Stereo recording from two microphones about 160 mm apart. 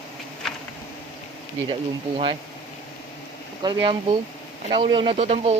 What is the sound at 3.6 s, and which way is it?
Speech, 30° right (ahead or behind).